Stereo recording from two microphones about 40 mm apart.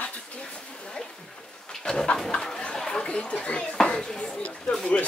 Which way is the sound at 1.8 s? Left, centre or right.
Left.